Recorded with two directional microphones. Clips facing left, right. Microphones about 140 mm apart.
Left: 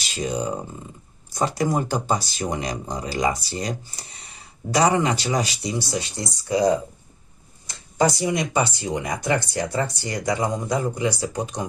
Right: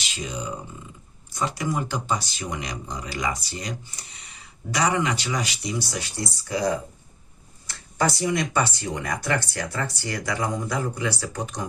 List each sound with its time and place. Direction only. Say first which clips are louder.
0.0 s speech: left 7 dB; 40° left (ahead or behind); by 11.6 s 20° left (ahead or behind)